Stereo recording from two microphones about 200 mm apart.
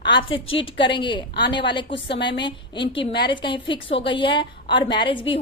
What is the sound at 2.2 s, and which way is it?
A woman's voice, 25° left (ahead or behind).